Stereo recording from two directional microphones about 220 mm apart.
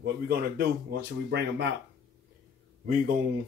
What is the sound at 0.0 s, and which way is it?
Speech, 45° right (ahead or behind).